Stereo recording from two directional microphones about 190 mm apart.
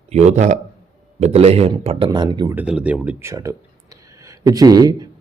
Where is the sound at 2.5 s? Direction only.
5° right (ahead or behind).